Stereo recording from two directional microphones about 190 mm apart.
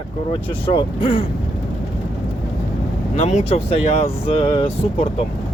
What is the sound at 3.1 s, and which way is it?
Speech, 35° left (ahead or behind).